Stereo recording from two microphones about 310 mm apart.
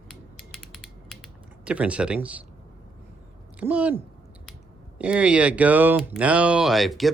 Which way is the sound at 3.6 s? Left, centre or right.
Centre.